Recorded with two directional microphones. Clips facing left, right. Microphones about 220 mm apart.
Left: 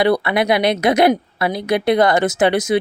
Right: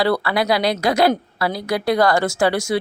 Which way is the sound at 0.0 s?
20° left (ahead or behind).